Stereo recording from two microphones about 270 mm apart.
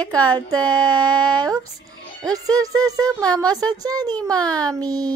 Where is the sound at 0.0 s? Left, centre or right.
Centre.